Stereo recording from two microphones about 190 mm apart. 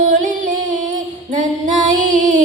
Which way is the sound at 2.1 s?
40° right (ahead or behind).